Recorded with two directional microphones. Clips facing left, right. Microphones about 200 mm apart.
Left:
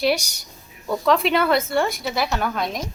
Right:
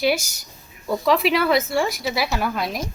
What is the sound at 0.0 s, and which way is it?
A woman's voice, centre (ahead or behind).